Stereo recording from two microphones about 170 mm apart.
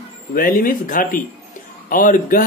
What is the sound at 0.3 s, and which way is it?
Speech, 55° left (ahead or behind).